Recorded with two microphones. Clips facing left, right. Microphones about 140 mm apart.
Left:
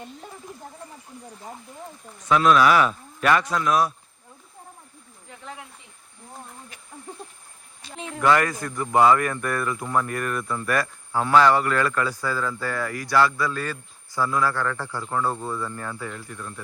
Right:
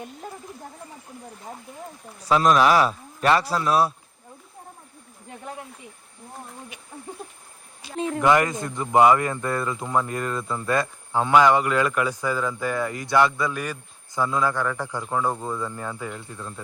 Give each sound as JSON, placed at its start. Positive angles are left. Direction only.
{"t": 2.1, "sound": "speech", "side_deg": -35}
{"t": 7.1, "sound": "a sound", "side_deg": -5}
{"t": 8.2, "sound": "a man's voice", "side_deg": -20}